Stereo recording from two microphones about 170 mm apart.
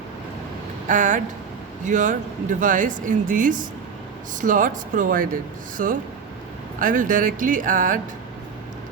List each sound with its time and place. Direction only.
0.9 s speech: 50° right (ahead or behind)